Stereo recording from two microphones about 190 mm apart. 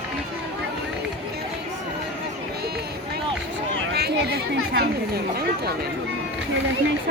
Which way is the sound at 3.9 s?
55° right (ahead or behind).